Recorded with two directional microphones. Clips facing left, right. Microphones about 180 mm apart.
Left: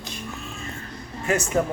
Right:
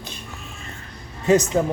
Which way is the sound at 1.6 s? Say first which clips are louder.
Right 2 dB; 5° right (ahead or behind).